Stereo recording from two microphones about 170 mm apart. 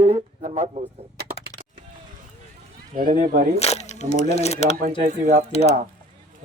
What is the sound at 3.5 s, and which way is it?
Speech, 40° left (ahead or behind).